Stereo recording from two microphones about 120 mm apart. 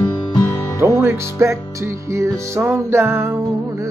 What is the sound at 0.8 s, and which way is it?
Music, 20° right (ahead or behind).